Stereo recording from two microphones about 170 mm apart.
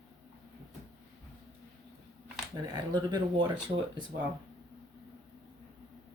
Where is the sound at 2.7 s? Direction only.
25° right (ahead or behind).